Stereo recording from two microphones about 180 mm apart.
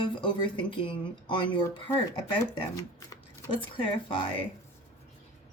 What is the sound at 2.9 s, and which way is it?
Speech, 20° left (ahead or behind).